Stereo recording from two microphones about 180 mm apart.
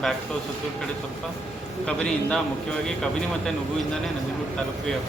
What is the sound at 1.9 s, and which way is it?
Speech, 5° left (ahead or behind).